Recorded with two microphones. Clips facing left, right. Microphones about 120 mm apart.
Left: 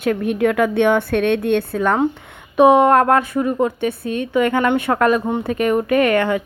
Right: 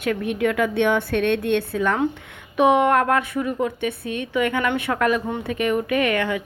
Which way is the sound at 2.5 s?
35° left (ahead or behind).